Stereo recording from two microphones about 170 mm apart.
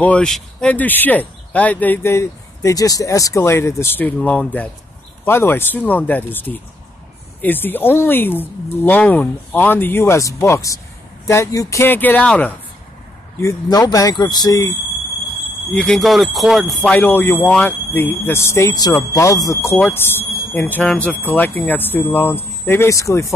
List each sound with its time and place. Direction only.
0.0 s speech: 5° left (ahead or behind)
13.4 s speech: 20° left (ahead or behind)
15.7 s speech: 5° left (ahead or behind)